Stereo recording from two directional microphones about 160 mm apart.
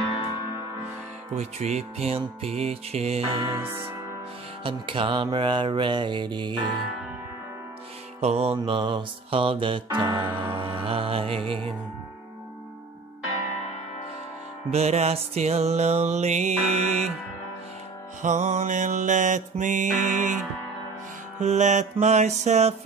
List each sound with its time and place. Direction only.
1.3 s speech: 45° right (ahead or behind)
3.5 s music: 15° right (ahead or behind)
4.6 s speech: 35° right (ahead or behind)
8.2 s music: 40° right (ahead or behind)
14.7 s music: 40° right (ahead or behind)
18.2 s music: 45° right (ahead or behind)
21.4 s music: 50° right (ahead or behind)